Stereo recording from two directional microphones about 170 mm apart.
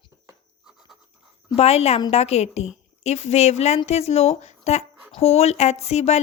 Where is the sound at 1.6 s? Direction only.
40° left (ahead or behind).